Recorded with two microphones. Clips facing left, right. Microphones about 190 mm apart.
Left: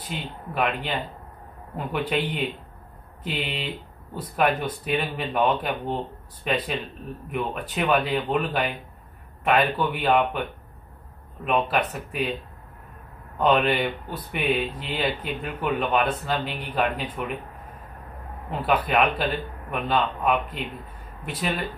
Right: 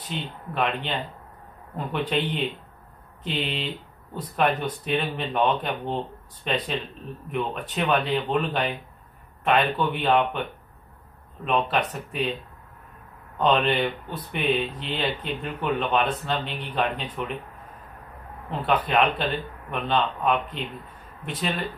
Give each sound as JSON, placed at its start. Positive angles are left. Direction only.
{"t": 0.0, "sound": "speech", "side_deg": 10}
{"t": 11.4, "sound": "speech", "side_deg": 10}
{"t": 13.4, "sound": "speech", "side_deg": 10}
{"t": 18.5, "sound": "speech", "side_deg": 10}